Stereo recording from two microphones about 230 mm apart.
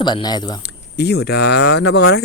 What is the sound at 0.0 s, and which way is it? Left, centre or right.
Speech, centre.